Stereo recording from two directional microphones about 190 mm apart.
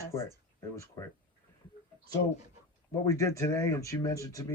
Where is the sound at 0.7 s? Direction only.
15° left (ahead or behind).